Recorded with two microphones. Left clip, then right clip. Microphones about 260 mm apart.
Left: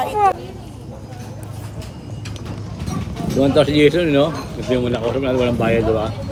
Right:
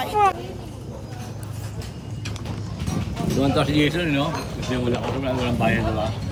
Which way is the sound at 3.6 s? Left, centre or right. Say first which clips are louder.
Left 7 dB; left.